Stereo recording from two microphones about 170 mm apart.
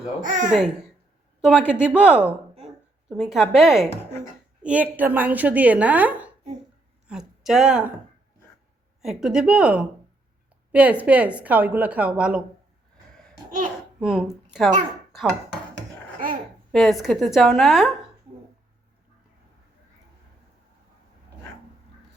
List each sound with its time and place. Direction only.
0.2 s speech: 50° right (ahead or behind)
0.5 s a woman's voice: 5° right (ahead or behind)
9.0 s a woman's voice: 5° right (ahead or behind)
14.0 s a woman's voice: centre (ahead or behind)
16.7 s a woman's voice: centre (ahead or behind)